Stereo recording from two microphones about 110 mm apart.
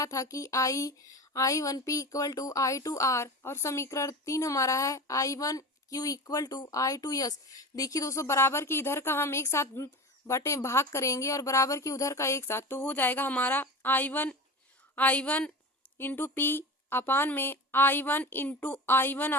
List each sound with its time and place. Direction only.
0.0 s a woman's voice: 30° left (ahead or behind)